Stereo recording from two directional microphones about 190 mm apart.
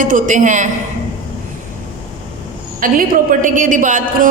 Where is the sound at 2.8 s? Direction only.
45° right (ahead or behind).